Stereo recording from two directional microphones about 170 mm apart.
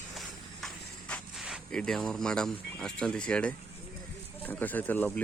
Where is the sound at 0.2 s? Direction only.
5° left (ahead or behind).